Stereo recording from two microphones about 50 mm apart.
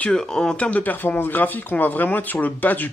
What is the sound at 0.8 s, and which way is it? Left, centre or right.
Speech, left.